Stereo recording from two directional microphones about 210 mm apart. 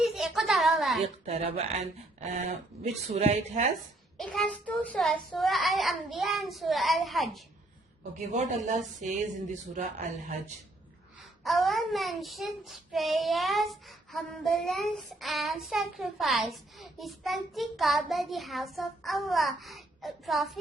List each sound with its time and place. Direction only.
0.0 s a sound: centre (ahead or behind)
1.0 s speech: 30° right (ahead or behind)
4.2 s child singing: 5° left (ahead or behind)
8.2 s speech: 35° right (ahead or behind)
11.4 s child singing: centre (ahead or behind)